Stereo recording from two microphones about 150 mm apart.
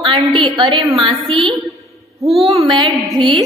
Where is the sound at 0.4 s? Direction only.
30° right (ahead or behind).